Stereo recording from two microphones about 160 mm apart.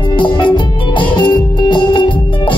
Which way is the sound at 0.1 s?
30° left (ahead or behind).